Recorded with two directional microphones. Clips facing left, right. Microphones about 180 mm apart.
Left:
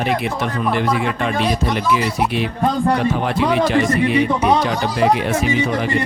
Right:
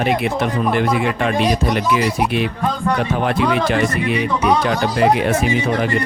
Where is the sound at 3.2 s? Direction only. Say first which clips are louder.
Even; 55° right (ahead or behind).